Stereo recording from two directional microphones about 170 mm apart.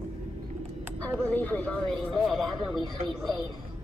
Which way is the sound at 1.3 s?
10° left (ahead or behind).